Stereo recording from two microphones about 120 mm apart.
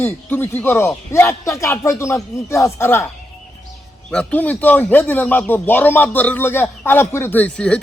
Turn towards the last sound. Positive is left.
turn(degrees=10)  # may be behind; listen again after turning